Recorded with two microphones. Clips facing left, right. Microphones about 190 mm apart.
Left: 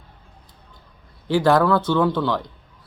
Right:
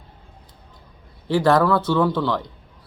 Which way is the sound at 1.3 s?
Centre (ahead or behind).